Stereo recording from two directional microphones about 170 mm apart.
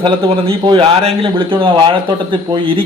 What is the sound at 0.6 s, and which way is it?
Speech, 35° right (ahead or behind).